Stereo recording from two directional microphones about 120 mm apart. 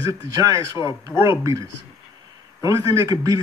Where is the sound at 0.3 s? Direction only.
30° right (ahead or behind).